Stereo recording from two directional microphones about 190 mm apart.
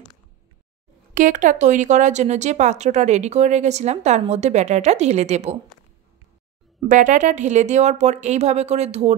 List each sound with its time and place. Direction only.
1.1 s speech: 45° right (ahead or behind)
6.9 s speech: 40° right (ahead or behind)